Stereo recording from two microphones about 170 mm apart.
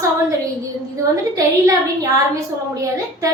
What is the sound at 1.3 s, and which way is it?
A woman's voice, 20° right (ahead or behind).